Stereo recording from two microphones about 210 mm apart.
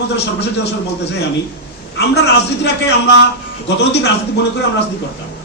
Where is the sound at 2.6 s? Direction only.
55° left (ahead or behind).